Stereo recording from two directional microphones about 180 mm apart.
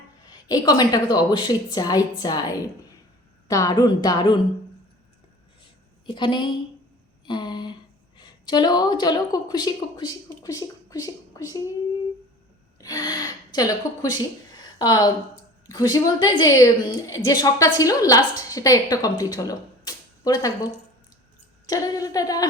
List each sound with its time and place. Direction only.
0.3 s a woman's voice: 20° left (ahead or behind)
3.5 s a woman's voice: 20° left (ahead or behind)
6.1 s a woman's voice: 25° left (ahead or behind)
7.3 s a sound: 25° left (ahead or behind)
8.2 s a woman's voice: 25° left (ahead or behind)
12.8 s a woman's voice: 20° left (ahead or behind)
21.7 s speech: 20° left (ahead or behind)